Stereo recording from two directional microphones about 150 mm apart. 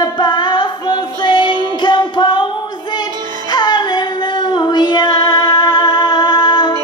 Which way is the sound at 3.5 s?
30° left (ahead or behind).